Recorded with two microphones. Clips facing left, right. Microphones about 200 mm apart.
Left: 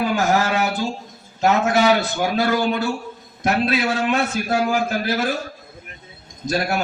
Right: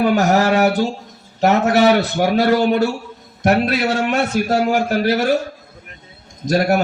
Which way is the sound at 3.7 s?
40° right (ahead or behind).